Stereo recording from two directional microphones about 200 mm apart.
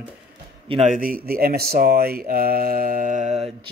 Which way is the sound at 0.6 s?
30° right (ahead or behind).